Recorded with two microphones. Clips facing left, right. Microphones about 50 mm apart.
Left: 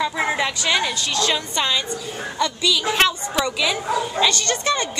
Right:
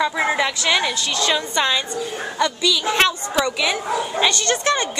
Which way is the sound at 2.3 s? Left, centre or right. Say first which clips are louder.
Right 1 dB; right.